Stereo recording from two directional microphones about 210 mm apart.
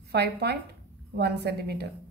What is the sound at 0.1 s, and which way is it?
A woman's voice, 50° right (ahead or behind).